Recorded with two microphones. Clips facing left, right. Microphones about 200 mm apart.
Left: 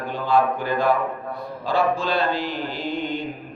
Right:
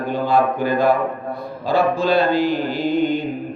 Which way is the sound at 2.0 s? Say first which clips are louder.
Right 7 dB; 10° right (ahead or behind).